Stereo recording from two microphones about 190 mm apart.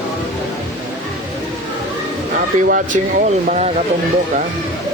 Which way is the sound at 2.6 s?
50° right (ahead or behind).